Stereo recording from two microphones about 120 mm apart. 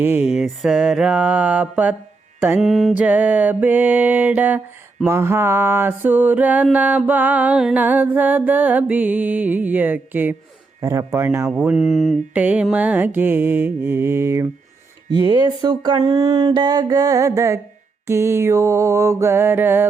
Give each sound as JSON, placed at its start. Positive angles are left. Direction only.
{"t": 0.0, "sound": "music", "side_deg": -10}
{"t": 2.6, "sound": "mantra", "side_deg": 0}
{"t": 2.9, "sound": "music", "side_deg": -15}
{"t": 5.0, "sound": "mantra", "side_deg": -20}
{"t": 6.7, "sound": "music", "side_deg": -10}
{"t": 10.8, "sound": "mantra", "side_deg": -25}
{"t": 11.5, "sound": "mantra", "side_deg": -10}
{"t": 12.3, "sound": "music", "side_deg": -10}
{"t": 15.3, "sound": "speech", "side_deg": -40}
{"t": 18.0, "sound": "mantra", "side_deg": -25}